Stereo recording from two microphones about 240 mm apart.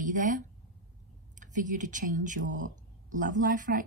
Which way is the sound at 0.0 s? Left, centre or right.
Right.